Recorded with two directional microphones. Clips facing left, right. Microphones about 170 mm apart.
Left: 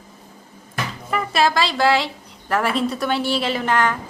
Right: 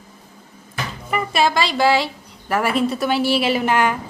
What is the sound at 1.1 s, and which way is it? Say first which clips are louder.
A woman's voice: even; centre (ahead or behind).